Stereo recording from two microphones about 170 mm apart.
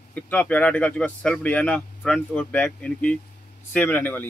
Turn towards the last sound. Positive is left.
turn(degrees=10)  # may be behind; listen again after turning